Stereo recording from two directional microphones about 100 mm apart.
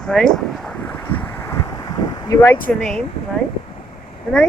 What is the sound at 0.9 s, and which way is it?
Vehicle, 15° left (ahead or behind).